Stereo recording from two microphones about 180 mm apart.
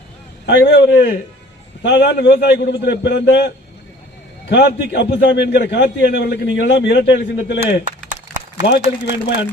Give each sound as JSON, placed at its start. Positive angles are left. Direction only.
{"t": 0.4, "sound": "a man's voice", "side_deg": 70}
{"t": 8.6, "sound": "a man's voice", "side_deg": 70}